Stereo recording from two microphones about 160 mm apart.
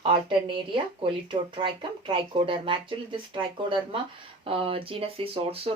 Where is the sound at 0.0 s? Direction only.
30° right (ahead or behind).